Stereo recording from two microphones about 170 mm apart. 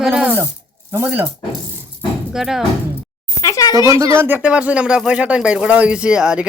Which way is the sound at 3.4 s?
20° left (ahead or behind).